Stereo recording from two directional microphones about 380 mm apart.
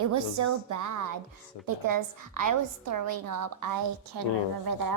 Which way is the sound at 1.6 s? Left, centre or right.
Right.